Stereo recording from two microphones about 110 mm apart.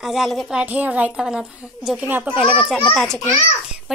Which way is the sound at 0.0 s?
Centre (ahead or behind).